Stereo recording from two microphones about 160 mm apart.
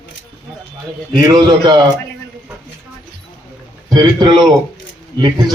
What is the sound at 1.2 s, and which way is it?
Speech, 25° right (ahead or behind).